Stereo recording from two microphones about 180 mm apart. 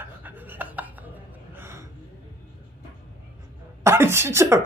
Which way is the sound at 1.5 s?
15° right (ahead or behind).